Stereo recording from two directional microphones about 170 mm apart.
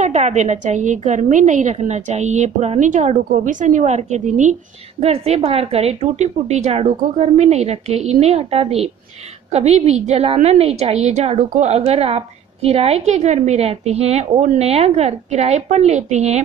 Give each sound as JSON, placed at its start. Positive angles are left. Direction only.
{"t": 0.0, "sound": "a woman's voice", "side_deg": -40}
{"t": 5.0, "sound": "a woman's voice", "side_deg": -35}